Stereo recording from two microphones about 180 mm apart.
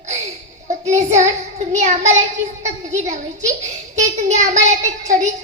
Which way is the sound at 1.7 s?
40° right (ahead or behind).